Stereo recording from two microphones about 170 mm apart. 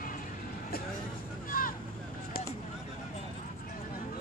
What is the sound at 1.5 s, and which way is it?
Vehicle, 55° left (ahead or behind).